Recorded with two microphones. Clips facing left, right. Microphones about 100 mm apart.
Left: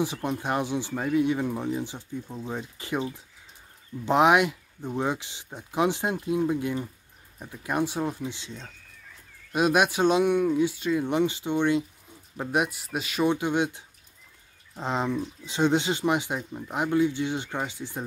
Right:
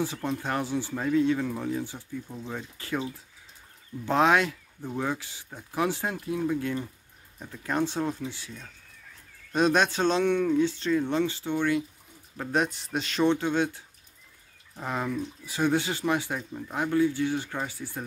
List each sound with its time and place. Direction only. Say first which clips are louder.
0.0 s speech: left 2 dB; 15° left (ahead or behind)
9.5 s speech: left 1 dB; 10° left (ahead or behind)